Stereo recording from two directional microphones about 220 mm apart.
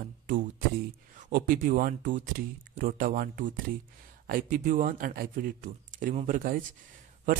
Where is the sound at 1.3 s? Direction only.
40° right (ahead or behind).